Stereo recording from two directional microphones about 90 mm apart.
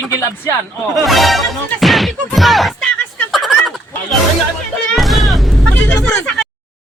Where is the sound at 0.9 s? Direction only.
Centre (ahead or behind).